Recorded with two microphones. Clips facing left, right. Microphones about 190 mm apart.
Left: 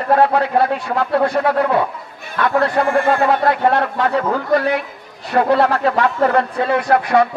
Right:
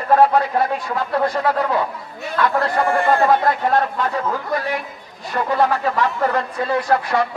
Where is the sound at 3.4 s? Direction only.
65° left (ahead or behind).